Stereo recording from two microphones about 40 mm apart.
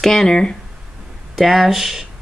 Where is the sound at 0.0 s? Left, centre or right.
Centre.